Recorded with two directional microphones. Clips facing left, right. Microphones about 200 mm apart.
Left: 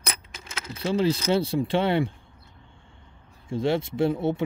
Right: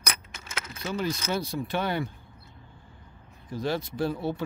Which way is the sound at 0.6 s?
30° left (ahead or behind).